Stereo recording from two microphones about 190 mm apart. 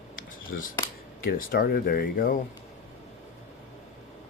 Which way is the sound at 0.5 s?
50° left (ahead or behind).